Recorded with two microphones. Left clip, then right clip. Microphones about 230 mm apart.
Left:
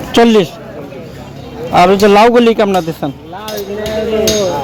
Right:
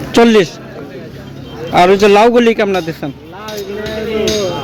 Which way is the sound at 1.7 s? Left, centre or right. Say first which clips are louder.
Left 1 dB; centre.